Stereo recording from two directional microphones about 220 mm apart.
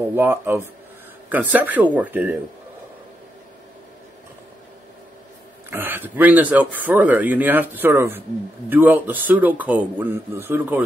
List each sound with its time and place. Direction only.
0.1 s speech: 10° right (ahead or behind)
5.7 s speech: 10° right (ahead or behind)